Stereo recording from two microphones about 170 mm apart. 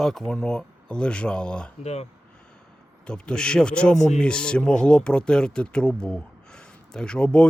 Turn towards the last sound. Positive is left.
turn(degrees=5)  # may be behind; listen again after turning